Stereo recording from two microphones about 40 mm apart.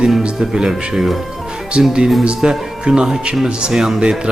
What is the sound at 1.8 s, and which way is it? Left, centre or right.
A man's voice, right.